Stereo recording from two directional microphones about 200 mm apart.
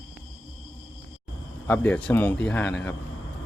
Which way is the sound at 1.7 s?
10° left (ahead or behind).